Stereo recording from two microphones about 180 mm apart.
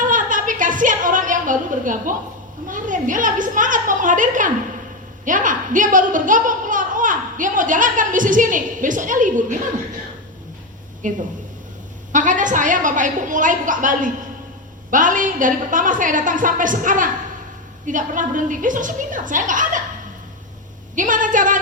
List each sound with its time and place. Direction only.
0.0 s a sound: 45° right (ahead or behind)
2.6 s speech: 45° right (ahead or behind)
11.0 s speech: 45° right (ahead or behind)
20.9 s speech: 45° right (ahead or behind)